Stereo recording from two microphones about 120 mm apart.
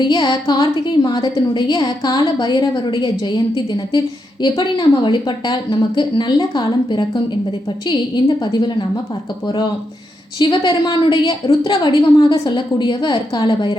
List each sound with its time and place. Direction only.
0.0 s a woman's voice: 35° left (ahead or behind)
10.3 s a woman's voice: 40° left (ahead or behind)